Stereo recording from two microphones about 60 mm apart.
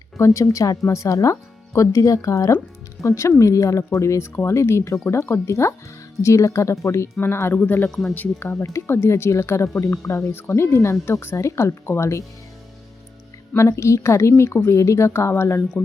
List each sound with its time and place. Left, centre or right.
0.2 s speech: left
3.0 s speech: left
7.9 s speech: centre
8.1 s speech: left
13.6 s speech: left